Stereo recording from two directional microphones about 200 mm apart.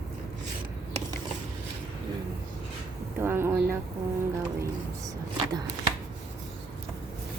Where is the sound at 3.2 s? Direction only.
10° right (ahead or behind).